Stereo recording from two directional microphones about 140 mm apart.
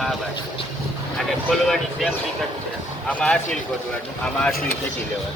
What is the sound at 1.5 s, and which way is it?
Speech, centre (ahead or behind).